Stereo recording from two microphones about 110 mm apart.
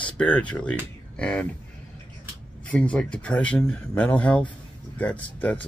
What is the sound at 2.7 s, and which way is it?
Speech, 10° left (ahead or behind).